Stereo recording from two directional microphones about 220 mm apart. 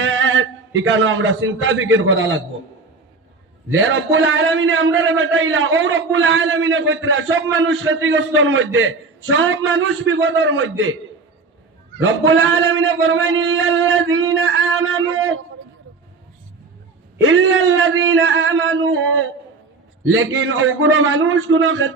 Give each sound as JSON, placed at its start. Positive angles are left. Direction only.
{"t": 0.0, "sound": "a man's voice", "side_deg": -60}
{"t": 3.7, "sound": "a man's voice", "side_deg": -60}
{"t": 12.0, "sound": "a man's voice", "side_deg": -65}
{"t": 17.2, "sound": "a man's voice", "side_deg": -65}